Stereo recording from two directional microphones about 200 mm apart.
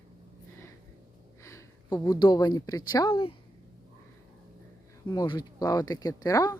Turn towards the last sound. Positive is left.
turn(degrees=20)  # may be behind; listen again after turning